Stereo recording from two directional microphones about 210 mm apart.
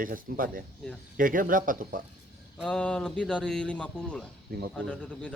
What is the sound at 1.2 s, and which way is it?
Speech, 40° right (ahead or behind).